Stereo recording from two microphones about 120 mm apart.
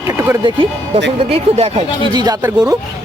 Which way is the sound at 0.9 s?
55° right (ahead or behind).